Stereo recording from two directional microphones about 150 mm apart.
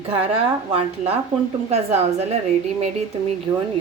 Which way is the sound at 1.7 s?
45° right (ahead or behind).